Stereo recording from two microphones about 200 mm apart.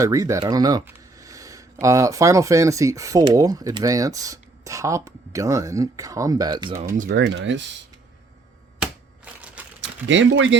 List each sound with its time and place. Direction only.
0.0 s speech: 15° right (ahead or behind)
6.9 s speech: 40° right (ahead or behind)
7.2 s speech: 65° right (ahead or behind)
8.8 s a sound: 5° right (ahead or behind)
9.8 s speech: 70° right (ahead or behind)